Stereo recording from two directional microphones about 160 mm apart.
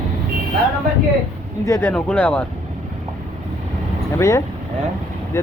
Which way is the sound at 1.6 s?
15° left (ahead or behind).